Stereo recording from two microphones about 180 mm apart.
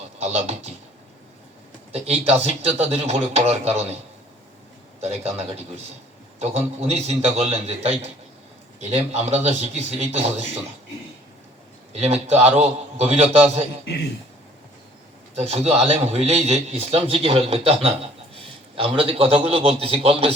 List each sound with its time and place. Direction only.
0.2 s a man's voice: 35° right (ahead or behind)
1.9 s a man's voice: 35° right (ahead or behind)
4.9 s a man's voice: 35° right (ahead or behind)
11.9 s a man's voice: 35° right (ahead or behind)
15.4 s a man's voice: 35° right (ahead or behind)